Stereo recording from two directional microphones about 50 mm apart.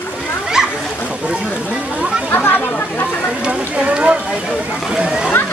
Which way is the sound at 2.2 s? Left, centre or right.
Left.